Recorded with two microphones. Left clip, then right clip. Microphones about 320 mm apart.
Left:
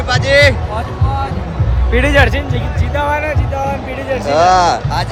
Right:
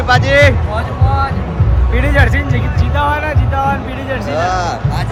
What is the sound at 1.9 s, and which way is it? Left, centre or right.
Speech, left.